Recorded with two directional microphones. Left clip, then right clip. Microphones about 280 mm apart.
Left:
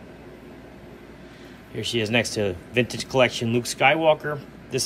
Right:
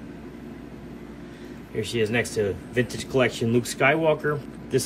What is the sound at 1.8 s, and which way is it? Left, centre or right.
Speech, centre.